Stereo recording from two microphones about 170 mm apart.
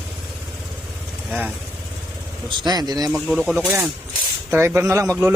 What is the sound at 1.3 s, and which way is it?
Speech, 10° right (ahead or behind).